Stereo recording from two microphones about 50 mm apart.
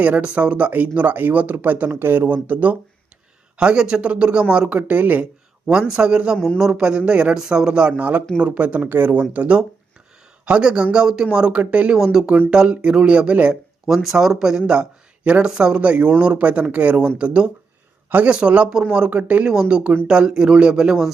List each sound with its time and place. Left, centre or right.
0.2 s speech: right
2.2 s speech: right
3.6 s speech: centre
4.7 s speech: right
5.9 s speech: centre
7.3 s speech: centre
7.9 s speech: right
9.3 s speech: right
11.9 s speech: centre
13.5 s speech: centre
14.7 s speech: right
18.1 s speech: right
20.1 s speech: centre